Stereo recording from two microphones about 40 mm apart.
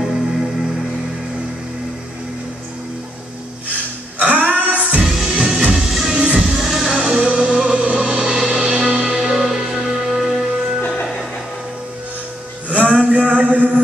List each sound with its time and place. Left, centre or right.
0.0 s music: centre
4.2 s music: right
5.0 s music: centre
6.1 s music: centre
6.4 s music: centre; by 9.3 s right
9.3 s music: centre
12.6 s music: right
13.1 s a sound: right